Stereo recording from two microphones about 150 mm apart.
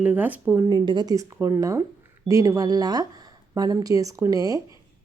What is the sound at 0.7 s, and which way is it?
Speech, 30° right (ahead or behind).